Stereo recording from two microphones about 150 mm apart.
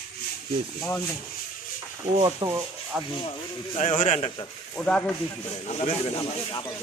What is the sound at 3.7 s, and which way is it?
Speech, 50° left (ahead or behind).